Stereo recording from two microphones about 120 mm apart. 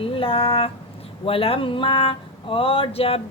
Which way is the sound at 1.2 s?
50° left (ahead or behind).